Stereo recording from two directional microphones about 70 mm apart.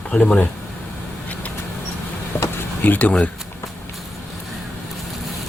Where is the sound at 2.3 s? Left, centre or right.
Left.